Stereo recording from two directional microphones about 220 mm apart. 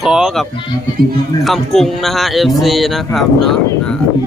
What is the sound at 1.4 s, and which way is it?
A man's voice, centre (ahead or behind).